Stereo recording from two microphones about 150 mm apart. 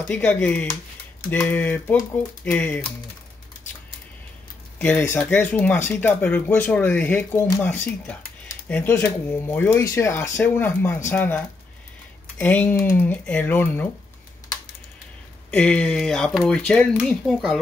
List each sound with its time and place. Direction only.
0.0 s speech: 10° left (ahead or behind)
4.7 s speech: 10° left (ahead or behind)
15.5 s speech: 5° left (ahead or behind)